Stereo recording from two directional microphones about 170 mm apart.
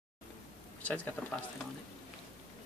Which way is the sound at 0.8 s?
10° left (ahead or behind).